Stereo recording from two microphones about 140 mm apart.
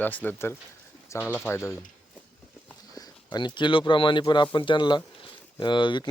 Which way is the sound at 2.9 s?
30° left (ahead or behind).